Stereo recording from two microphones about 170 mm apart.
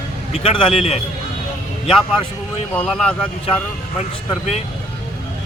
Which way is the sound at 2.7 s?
5° left (ahead or behind).